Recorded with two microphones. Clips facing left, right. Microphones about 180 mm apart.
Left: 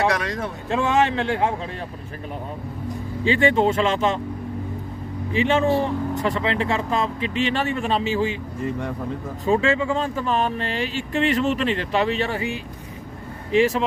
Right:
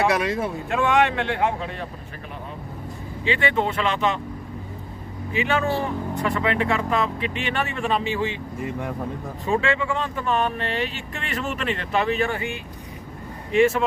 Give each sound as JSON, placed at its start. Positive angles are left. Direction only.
{"t": 0.1, "sound": "speech", "side_deg": -10}
{"t": 0.7, "sound": "speech", "side_deg": 30}
{"t": 3.2, "sound": "speech", "side_deg": 30}
{"t": 5.3, "sound": "speech", "side_deg": 25}
{"t": 9.5, "sound": "speech", "side_deg": 30}